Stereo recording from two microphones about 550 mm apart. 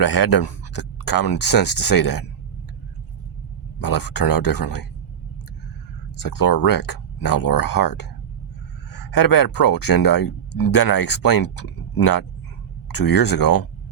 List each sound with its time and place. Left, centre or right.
0.0 s speech: left
3.8 s speech: left
6.1 s speech: left
9.1 s speech: left